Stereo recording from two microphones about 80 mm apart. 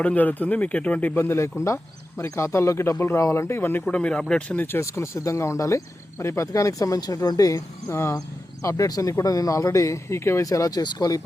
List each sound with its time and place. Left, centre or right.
0.0 s speech: centre
1.1 s speech: left
3.8 s speech: centre
4.6 s speech: left
10.4 s speech: left